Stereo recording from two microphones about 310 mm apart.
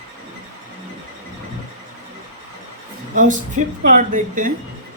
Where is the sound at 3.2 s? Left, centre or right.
Right.